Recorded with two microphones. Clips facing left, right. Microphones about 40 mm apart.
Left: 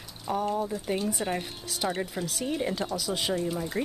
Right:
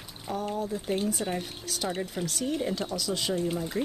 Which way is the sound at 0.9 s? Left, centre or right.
Left.